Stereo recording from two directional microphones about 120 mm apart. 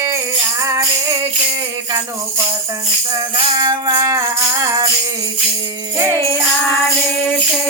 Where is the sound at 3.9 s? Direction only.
25° right (ahead or behind).